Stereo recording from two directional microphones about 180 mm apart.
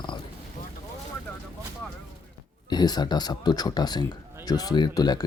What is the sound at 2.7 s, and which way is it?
Speech, 20° left (ahead or behind).